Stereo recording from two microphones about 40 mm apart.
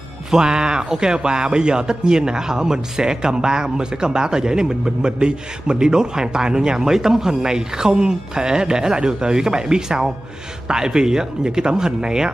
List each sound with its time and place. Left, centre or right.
0.3 s a man's voice: centre